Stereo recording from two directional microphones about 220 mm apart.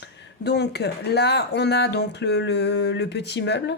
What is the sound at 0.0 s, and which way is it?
Speech, 50° left (ahead or behind).